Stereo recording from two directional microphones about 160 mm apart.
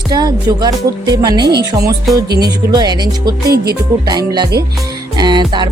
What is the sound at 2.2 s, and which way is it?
Speech, 85° right.